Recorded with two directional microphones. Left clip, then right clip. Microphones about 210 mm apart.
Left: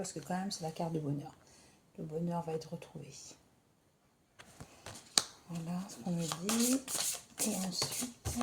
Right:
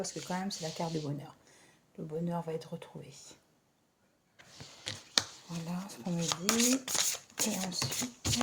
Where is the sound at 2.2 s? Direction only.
25° right (ahead or behind).